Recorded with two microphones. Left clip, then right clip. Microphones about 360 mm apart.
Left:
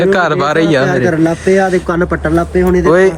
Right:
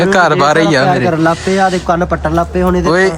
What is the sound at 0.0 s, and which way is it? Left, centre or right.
Speech, centre.